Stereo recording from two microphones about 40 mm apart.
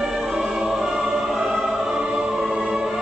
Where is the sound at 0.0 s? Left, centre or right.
Centre.